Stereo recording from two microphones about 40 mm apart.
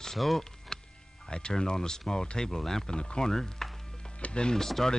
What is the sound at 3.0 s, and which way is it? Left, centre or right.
Speech, left.